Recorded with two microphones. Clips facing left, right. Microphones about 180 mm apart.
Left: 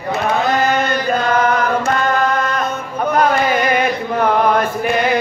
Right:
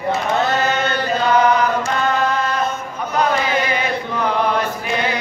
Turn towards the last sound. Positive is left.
turn(degrees=55)  # may be behind; listen again after turning